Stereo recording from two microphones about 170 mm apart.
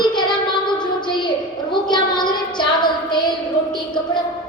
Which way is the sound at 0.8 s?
25° left (ahead or behind).